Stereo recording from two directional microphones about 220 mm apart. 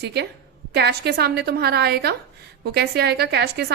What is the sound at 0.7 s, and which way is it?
A woman's voice, 45° right (ahead or behind).